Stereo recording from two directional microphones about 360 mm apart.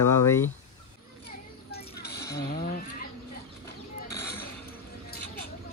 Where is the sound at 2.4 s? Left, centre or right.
Left.